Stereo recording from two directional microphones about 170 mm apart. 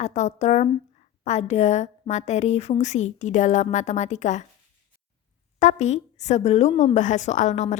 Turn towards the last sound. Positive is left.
turn(degrees=45)  # may be behind; listen again after turning